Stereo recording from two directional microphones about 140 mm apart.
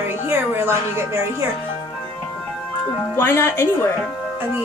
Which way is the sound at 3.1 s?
15° left (ahead or behind).